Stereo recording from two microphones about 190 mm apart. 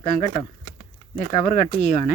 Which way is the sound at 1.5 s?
40° left (ahead or behind).